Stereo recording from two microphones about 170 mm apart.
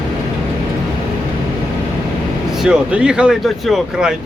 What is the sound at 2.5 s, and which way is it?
Speech, 5° right (ahead or behind).